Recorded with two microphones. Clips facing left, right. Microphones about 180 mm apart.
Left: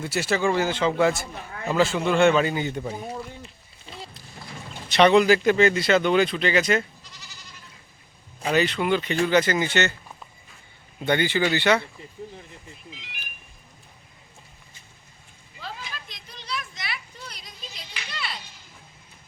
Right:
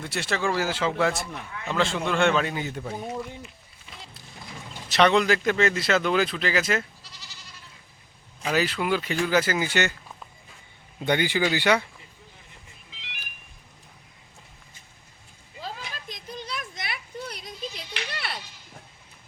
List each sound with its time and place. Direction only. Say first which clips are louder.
0.0 s speech: left 4 dB; 5° left (ahead or behind)
3.4 s run: left 1 dB; 30° left (ahead or behind)
4.9 s speech: left 4 dB; centre (ahead or behind)
8.4 s speech: left 3 dB; 5° right (ahead or behind)
11.0 s speech: left 1 dB; 15° right (ahead or behind)
15.6 s a sound: right 1 dB; 45° right (ahead or behind)
17.9 s music: left 3 dB; 60° right (ahead or behind)